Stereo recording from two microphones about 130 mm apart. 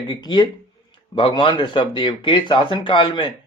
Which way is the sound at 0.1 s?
30° left (ahead or behind).